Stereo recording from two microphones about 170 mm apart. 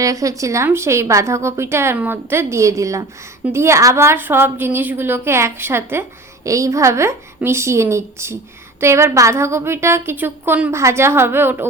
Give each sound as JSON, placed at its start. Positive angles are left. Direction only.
{"t": 0.0, "sound": "a woman's voice", "side_deg": -20}